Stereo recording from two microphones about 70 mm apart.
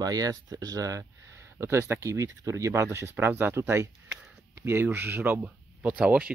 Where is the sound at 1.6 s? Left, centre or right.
Right.